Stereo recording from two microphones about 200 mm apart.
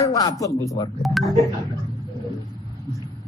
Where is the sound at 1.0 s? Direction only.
Centre (ahead or behind).